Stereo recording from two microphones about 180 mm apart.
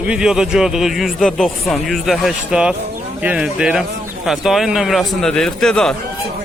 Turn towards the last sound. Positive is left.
turn(degrees=5)  # may be behind; listen again after turning